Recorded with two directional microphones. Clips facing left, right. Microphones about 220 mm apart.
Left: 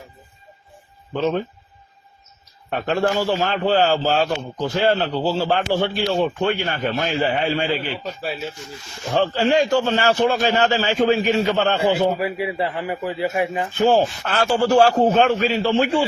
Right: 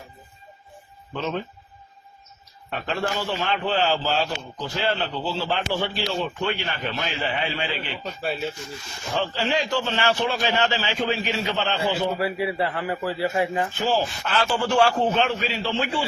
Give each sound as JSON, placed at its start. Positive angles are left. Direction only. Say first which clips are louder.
{"t": 1.1, "sound": "speech", "louder": "left 7 dB", "side_deg": 40}
{"t": 2.6, "sound": "a man's voice", "louder": "left 7 dB", "side_deg": 50}
{"t": 8.2, "sound": "speech", "louder": "right 3 dB", "side_deg": 0}
{"t": 9.1, "sound": "a man's voice", "louder": "left 7 dB", "side_deg": 45}
{"t": 12.1, "sound": "speech", "louder": "left 1 dB", "side_deg": 15}
{"t": 13.7, "sound": "a man's voice", "louder": "left 11 dB", "side_deg": 50}